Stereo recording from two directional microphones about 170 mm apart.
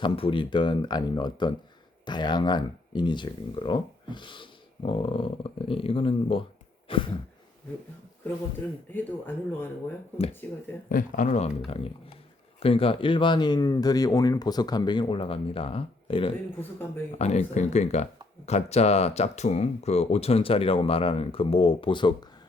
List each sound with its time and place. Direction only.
0.0 s speech: 30° left (ahead or behind)
6.8 s a sound: 30° left (ahead or behind)
8.9 s speech: 10° left (ahead or behind)
10.8 s speech: 50° left (ahead or behind)
12.5 s speech: 35° left (ahead or behind)